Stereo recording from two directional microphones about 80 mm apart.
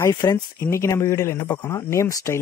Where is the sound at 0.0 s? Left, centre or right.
Left.